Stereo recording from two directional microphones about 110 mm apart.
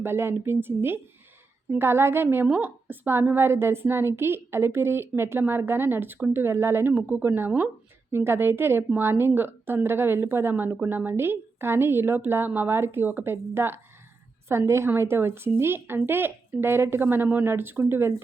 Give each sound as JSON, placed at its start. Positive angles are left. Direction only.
{"t": 0.0, "sound": "a woman's voice", "side_deg": -20}